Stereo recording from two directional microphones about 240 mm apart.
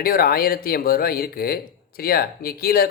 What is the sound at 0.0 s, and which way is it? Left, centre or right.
A man's voice, left.